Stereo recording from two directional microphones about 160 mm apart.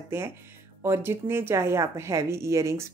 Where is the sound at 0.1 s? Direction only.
15° right (ahead or behind).